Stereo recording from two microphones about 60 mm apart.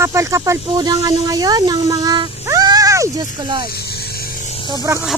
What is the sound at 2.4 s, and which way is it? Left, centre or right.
Music, right.